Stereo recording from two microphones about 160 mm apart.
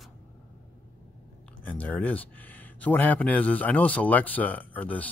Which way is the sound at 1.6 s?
10° left (ahead or behind).